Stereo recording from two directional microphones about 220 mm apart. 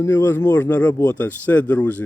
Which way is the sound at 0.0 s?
10° left (ahead or behind).